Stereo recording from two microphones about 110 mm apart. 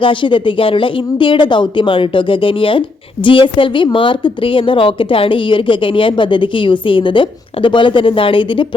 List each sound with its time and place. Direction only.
0.0 s a woman's voice: 50° left (ahead or behind)